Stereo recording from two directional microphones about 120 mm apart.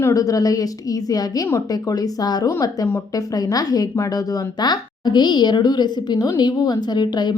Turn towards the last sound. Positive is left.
turn(degrees=35)  # may be behind; listen again after turning